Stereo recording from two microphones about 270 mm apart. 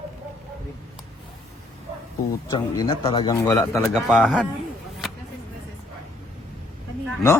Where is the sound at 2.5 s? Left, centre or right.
Centre.